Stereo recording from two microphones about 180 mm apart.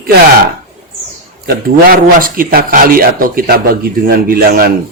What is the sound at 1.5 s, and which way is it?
A man's voice, 55° right (ahead or behind).